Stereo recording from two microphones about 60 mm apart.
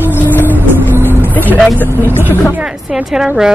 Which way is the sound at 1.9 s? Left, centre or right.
Right.